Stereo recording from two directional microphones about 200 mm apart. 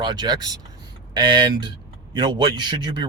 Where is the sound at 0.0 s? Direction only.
20° right (ahead or behind).